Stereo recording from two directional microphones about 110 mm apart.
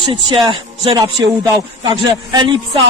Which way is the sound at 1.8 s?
45° right (ahead or behind).